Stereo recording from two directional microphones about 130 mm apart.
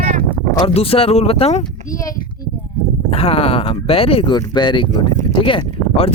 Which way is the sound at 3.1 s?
50° left (ahead or behind).